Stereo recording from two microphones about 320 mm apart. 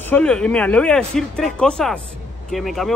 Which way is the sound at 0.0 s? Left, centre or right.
Centre.